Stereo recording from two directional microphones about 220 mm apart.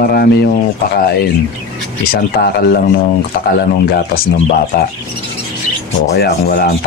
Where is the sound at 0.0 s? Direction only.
45° left (ahead or behind).